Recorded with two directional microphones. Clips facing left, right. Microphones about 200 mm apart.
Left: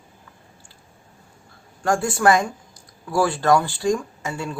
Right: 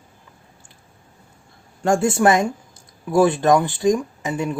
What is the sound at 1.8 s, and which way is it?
Speech, 25° right (ahead or behind).